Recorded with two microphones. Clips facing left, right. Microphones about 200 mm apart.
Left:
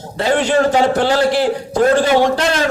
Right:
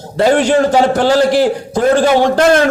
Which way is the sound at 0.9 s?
40° right (ahead or behind).